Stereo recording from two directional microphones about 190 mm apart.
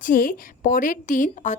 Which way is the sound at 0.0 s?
45° left (ahead or behind).